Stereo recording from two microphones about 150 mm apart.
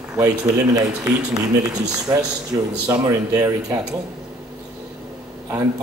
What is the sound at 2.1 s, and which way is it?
Speech, 25° right (ahead or behind).